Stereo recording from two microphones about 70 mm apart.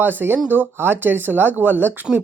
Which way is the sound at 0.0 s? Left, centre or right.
Right.